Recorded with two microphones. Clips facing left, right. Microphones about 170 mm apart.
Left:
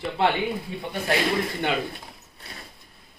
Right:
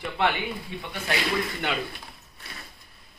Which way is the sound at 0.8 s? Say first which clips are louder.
Left 5 dB; 45° left (ahead or behind).